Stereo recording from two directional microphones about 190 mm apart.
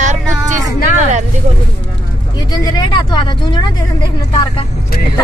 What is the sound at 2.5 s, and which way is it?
Speech, 20° left (ahead or behind).